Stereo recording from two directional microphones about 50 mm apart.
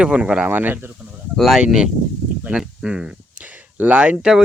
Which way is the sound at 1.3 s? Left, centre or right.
Centre.